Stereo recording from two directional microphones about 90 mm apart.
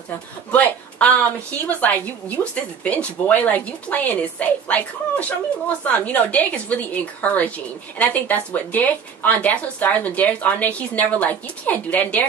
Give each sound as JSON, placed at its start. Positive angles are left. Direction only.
{"t": 0.5, "sound": "a woman's voice", "side_deg": 15}